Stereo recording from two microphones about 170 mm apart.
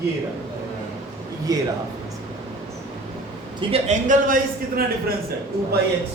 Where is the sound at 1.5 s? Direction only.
20° right (ahead or behind).